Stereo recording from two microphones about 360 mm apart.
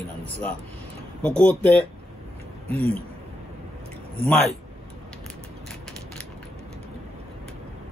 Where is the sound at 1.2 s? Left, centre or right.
Centre.